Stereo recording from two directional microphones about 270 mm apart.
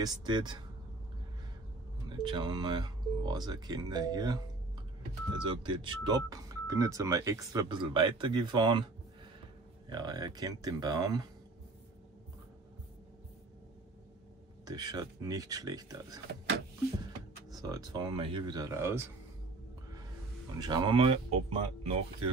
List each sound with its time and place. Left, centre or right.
0.0 s speech: centre
2.0 s speech: centre
5.4 s speech: centre
9.8 s speech: centre
14.6 s speech: centre
17.5 s speech: centre
20.5 s speech: centre